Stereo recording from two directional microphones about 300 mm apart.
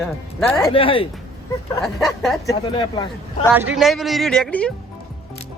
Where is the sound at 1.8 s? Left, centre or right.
Centre.